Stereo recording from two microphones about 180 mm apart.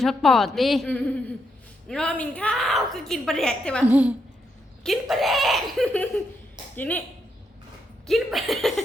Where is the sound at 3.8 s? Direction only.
10° right (ahead or behind); by 7.0 s 10° left (ahead or behind).